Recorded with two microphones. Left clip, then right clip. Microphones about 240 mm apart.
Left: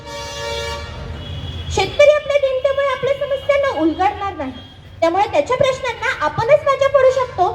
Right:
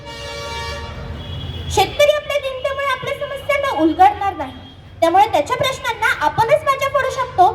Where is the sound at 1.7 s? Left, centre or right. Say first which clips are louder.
Left 2 dB; right.